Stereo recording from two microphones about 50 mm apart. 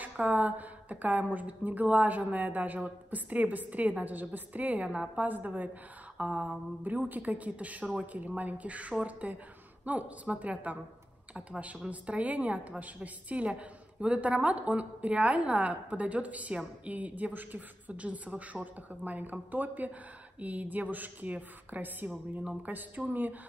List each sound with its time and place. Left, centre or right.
0.0 s a woman's voice: right
5.3 s a woman's voice: right
6.1 s a sound: right
7.1 s a woman's voice: right